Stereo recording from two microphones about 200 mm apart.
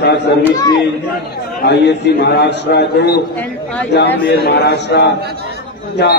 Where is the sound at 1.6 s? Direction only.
55° left (ahead or behind).